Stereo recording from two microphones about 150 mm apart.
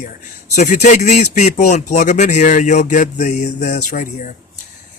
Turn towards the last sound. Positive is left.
turn(degrees=60)  # may be behind; listen again after turning